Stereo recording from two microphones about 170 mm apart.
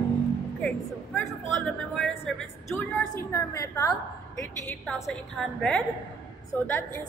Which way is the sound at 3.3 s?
20° left (ahead or behind).